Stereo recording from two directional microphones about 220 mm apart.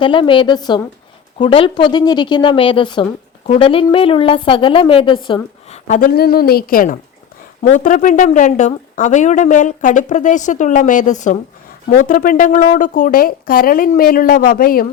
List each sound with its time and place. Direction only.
0.0 s a woman's voice: 20° left (ahead or behind); by 14.8 s 40° left (ahead or behind)